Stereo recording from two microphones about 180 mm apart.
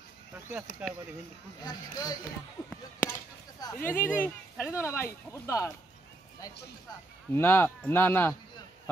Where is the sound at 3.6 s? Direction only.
15° left (ahead or behind).